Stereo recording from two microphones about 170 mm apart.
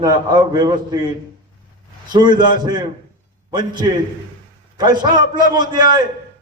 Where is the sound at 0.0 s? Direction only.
20° right (ahead or behind).